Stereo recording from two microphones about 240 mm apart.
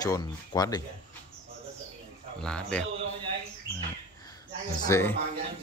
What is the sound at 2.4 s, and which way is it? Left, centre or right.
Speech, centre.